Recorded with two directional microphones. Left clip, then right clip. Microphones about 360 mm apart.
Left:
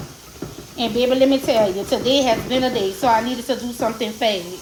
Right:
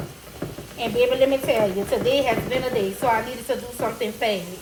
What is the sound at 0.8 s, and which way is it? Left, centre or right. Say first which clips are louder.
A woman's voice: left 2 dB; left.